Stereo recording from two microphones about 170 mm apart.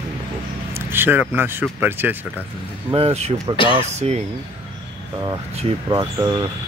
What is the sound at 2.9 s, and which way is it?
Speech, 35° right (ahead or behind).